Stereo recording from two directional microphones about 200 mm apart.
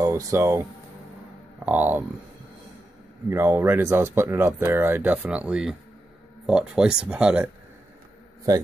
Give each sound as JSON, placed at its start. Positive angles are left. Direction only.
{"t": 0.0, "sound": "speech", "side_deg": -15}
{"t": 1.7, "sound": "speech", "side_deg": -10}
{"t": 3.3, "sound": "speech", "side_deg": -10}